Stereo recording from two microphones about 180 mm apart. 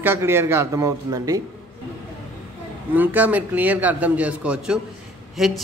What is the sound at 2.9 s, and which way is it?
A man's voice, 10° right (ahead or behind).